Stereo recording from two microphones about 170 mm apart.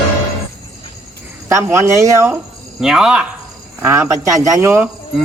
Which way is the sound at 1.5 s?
15° right (ahead or behind).